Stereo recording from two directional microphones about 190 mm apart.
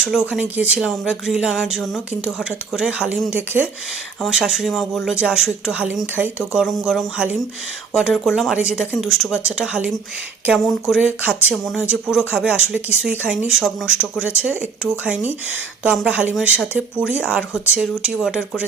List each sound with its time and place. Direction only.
0.0 s speech: 5° right (ahead or behind)